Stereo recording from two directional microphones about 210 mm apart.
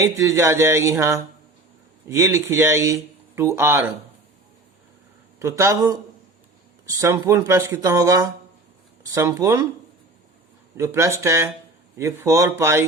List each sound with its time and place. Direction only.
0.0 s speech: 15° right (ahead or behind)
5.4 s speech: 15° right (ahead or behind)
10.8 s speech: 15° right (ahead or behind)